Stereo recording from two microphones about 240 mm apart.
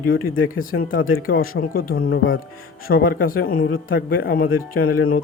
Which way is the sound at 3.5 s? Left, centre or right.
Left.